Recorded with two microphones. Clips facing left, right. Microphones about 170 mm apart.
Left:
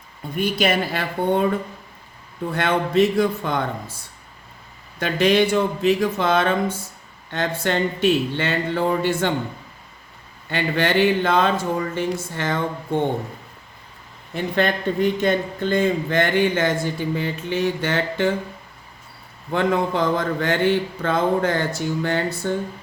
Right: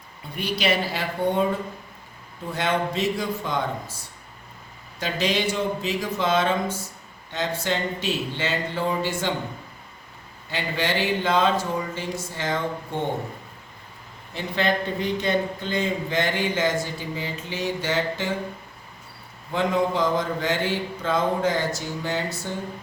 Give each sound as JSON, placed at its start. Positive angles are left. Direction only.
{"t": 0.3, "sound": "speech", "side_deg": 50}
{"t": 2.5, "sound": "speech", "side_deg": 60}
{"t": 4.9, "sound": "speech", "side_deg": 60}
{"t": 10.5, "sound": "speech", "side_deg": 60}
{"t": 14.3, "sound": "speech", "side_deg": 50}
{"t": 19.5, "sound": "speech", "side_deg": 60}